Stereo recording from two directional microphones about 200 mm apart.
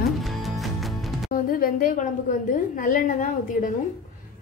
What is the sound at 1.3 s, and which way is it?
A woman's voice, 45° left (ahead or behind).